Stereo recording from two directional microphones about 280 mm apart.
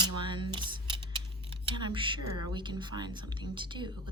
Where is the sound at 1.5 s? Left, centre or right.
Centre.